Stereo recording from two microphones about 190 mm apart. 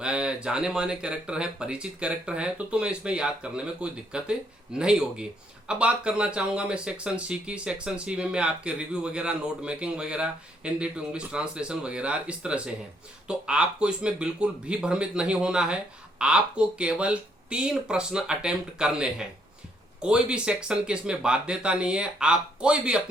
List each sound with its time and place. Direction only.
0.0 s speech: 5° right (ahead or behind)